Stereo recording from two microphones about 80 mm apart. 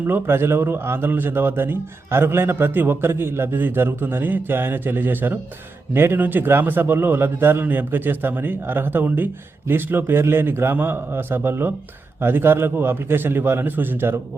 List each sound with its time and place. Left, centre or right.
0.1 s a man's voice: right